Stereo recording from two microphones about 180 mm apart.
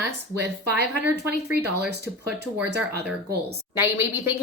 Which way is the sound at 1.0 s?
65° right (ahead or behind).